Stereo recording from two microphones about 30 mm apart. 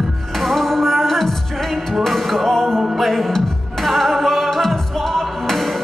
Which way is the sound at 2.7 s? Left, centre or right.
Centre.